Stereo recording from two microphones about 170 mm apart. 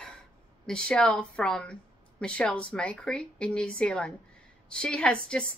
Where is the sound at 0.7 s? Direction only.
5° left (ahead or behind).